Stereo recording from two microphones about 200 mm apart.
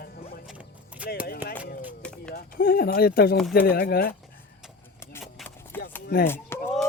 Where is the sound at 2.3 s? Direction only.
50° left (ahead or behind).